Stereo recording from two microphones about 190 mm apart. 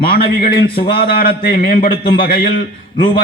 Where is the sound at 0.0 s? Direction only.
50° left (ahead or behind).